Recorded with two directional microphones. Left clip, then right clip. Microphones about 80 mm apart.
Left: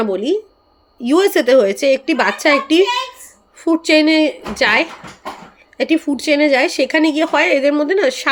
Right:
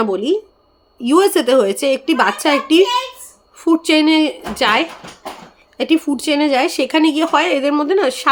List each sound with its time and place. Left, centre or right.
0.0 s speech: right